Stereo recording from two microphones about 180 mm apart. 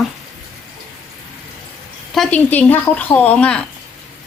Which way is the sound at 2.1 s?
5° left (ahead or behind).